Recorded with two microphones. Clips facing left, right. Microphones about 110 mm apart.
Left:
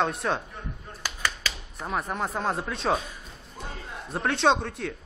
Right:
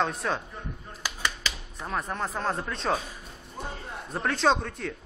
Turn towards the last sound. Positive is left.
turn(degrees=0)  # may be behind; listen again after turning